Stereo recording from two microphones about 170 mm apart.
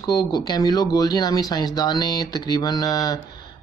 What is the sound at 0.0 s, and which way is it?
Speech, 25° left (ahead or behind).